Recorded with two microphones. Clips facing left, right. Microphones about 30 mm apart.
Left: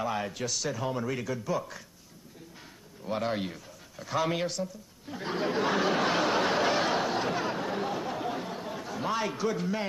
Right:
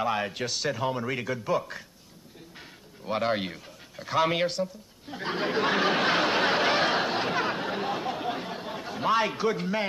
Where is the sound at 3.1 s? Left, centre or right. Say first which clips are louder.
Right 3 dB; right.